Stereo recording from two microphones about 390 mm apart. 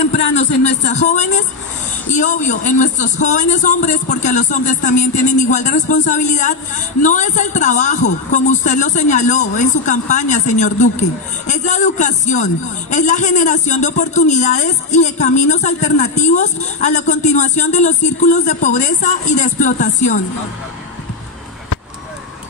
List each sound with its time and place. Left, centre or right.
0.1 s a man's voice: centre